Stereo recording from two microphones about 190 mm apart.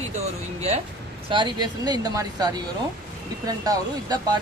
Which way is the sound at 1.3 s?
25° right (ahead or behind).